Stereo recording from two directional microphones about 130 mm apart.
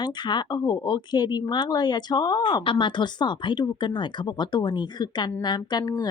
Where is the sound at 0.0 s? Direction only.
35° left (ahead or behind).